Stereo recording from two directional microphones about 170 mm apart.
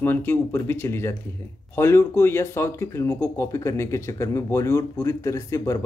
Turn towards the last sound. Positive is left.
turn(degrees=20)  # may be behind; listen again after turning